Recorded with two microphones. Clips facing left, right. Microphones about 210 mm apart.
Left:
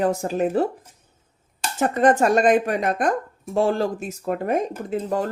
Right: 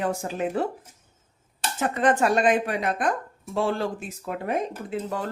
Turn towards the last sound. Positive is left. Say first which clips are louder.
# left 5 dB
turn(degrees=40)  # may be behind; listen again after turning